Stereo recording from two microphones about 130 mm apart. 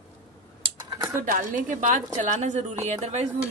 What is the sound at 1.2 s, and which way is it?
Speech, 90° right.